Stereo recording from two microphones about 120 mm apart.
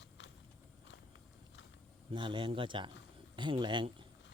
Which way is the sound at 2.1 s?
45° right (ahead or behind).